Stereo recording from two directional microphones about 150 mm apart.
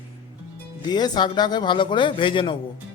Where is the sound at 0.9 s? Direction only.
30° left (ahead or behind).